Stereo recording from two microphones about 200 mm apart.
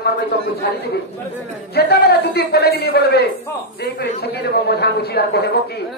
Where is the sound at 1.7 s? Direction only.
55° left (ahead or behind).